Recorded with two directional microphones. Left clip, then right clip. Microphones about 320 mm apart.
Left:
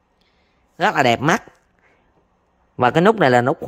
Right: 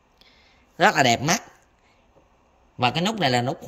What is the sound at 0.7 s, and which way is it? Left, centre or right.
Speech, centre.